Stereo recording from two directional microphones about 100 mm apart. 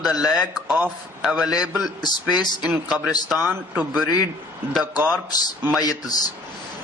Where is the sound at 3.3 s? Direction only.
20° right (ahead or behind).